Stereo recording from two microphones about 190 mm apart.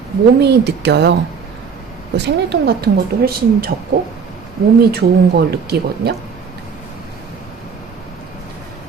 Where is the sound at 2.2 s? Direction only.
60° right (ahead or behind).